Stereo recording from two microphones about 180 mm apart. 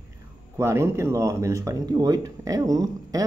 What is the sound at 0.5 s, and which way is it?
Speech, 15° right (ahead or behind).